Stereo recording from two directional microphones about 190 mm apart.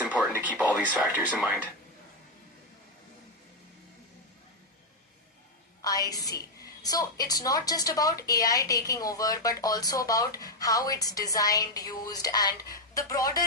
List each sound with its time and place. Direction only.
0.0 s a sound: 5° right (ahead or behind)
0.5 s speech: 5° left (ahead or behind)
0.9 s speech: 5° right (ahead or behind)
5.8 s a woman's voice: 20° left (ahead or behind)